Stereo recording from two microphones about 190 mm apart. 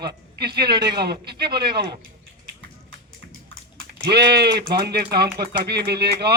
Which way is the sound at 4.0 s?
60° right (ahead or behind).